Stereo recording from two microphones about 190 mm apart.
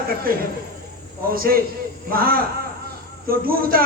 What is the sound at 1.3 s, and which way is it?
A man's voice, 50° right (ahead or behind).